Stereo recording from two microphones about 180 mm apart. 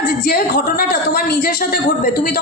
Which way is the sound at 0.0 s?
45° left (ahead or behind).